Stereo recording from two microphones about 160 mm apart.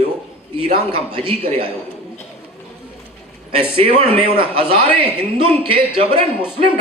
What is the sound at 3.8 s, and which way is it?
A man's voice, 40° right (ahead or behind).